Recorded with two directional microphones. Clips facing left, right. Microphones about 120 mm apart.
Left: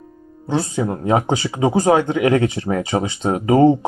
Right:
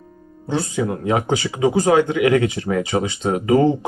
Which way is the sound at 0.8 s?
20° left (ahead or behind).